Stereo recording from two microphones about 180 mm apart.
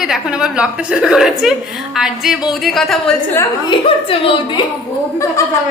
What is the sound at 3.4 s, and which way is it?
A woman's voice, 25° left (ahead or behind).